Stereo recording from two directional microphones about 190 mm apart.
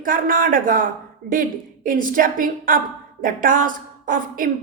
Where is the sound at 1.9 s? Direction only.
45° right (ahead or behind).